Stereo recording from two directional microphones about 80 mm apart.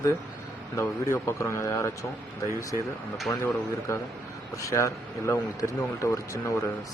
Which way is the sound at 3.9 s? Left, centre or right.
Left.